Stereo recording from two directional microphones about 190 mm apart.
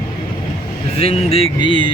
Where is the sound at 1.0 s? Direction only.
30° left (ahead or behind).